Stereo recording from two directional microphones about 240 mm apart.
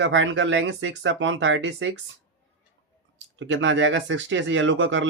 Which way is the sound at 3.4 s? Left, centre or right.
Right.